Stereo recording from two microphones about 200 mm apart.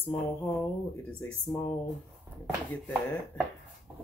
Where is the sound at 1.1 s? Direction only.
5° left (ahead or behind).